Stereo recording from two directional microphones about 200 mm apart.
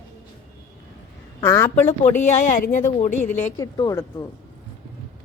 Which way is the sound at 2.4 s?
40° left (ahead or behind).